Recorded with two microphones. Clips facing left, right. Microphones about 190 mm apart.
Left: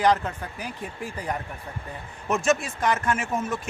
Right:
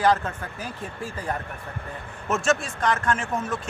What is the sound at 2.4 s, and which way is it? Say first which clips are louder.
Speech: left 1 dB; centre (ahead or behind).